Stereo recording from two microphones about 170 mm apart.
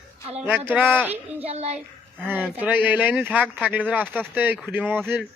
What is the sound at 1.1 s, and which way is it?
Speech, 10° right (ahead or behind).